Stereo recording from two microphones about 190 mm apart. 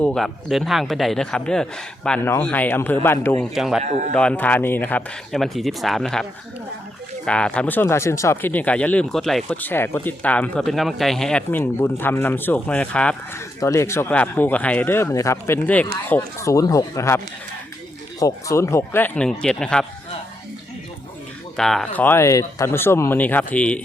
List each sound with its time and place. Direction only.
0.0 s a man's voice: 5° left (ahead or behind)
3.5 s a man's voice: centre (ahead or behind)
3.8 s a man's voice: 40° right (ahead or behind)
4.1 s a man's voice: 5° left (ahead or behind)
7.3 s speech: 5° left (ahead or behind)
18.2 s speech: 15° left (ahead or behind)
21.5 s speech: centre (ahead or behind)